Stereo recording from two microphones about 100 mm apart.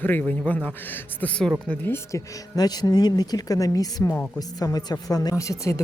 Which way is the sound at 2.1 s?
40° left (ahead or behind).